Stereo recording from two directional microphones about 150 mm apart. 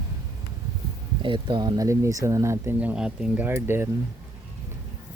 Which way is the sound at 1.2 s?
35° right (ahead or behind).